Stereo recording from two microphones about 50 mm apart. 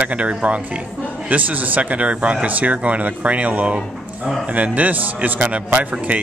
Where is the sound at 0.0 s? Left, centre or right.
Right.